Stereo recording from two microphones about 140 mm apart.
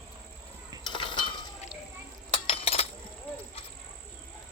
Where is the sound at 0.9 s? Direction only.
35° left (ahead or behind).